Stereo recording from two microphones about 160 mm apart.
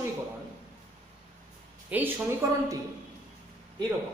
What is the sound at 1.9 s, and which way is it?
Speech, 15° right (ahead or behind).